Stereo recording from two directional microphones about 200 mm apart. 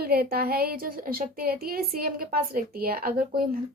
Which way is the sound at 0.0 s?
50° right (ahead or behind).